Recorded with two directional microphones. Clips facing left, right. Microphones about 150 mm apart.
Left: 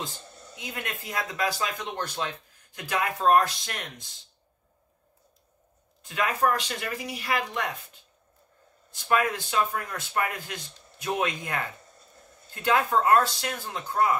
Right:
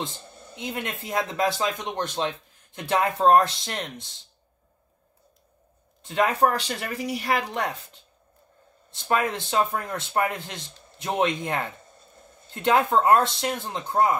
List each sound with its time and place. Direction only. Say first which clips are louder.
0.0 s speech: right 4 dB; 25° right (ahead or behind)
6.0 s speech: right 4 dB; 30° right (ahead or behind)
8.9 s speech: right 1 dB; 30° right (ahead or behind)